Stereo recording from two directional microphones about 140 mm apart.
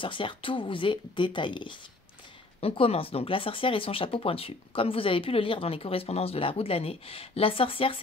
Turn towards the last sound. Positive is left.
turn(degrees=40)  # may be behind; listen again after turning